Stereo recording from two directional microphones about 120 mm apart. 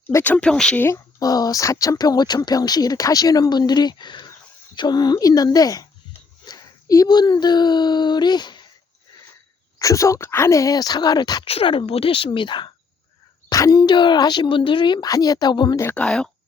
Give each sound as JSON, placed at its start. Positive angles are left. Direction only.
{"t": 0.1, "sound": "speech", "side_deg": 15}
{"t": 0.9, "sound": "speech", "side_deg": 30}
{"t": 9.7, "sound": "speech", "side_deg": 25}
{"t": 11.4, "sound": "speech", "side_deg": 50}
{"t": 13.5, "sound": "speech", "side_deg": 30}
{"t": 16.0, "sound": "speech", "side_deg": 5}